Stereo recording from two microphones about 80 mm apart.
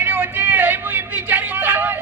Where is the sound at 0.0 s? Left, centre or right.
Right.